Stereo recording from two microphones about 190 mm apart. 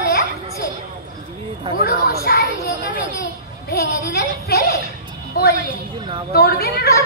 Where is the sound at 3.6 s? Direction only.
55° left (ahead or behind).